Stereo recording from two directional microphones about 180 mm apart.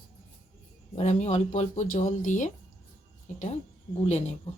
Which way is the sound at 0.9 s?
40° left (ahead or behind).